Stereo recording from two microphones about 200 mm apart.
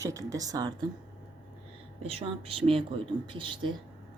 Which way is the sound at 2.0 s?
30° right (ahead or behind).